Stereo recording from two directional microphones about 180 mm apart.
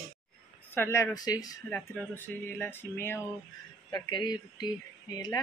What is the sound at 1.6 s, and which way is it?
Speech, 10° left (ahead or behind).